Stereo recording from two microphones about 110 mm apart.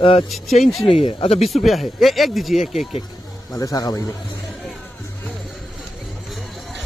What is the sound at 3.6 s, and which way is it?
Speech, 35° left (ahead or behind).